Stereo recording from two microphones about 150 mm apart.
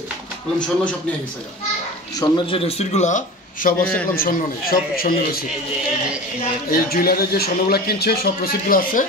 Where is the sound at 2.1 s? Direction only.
35° left (ahead or behind); by 3.7 s 55° left (ahead or behind).